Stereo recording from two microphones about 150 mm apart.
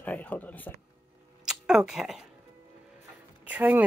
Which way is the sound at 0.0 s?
10° left (ahead or behind).